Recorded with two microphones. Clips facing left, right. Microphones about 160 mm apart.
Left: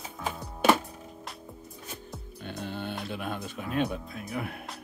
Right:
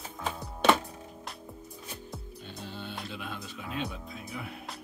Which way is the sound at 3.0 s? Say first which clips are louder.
Left 5 dB; 55° left (ahead or behind).